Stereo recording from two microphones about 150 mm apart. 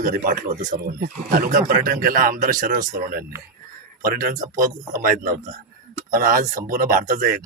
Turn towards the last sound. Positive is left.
turn(degrees=-60)  # may be behind; listen again after turning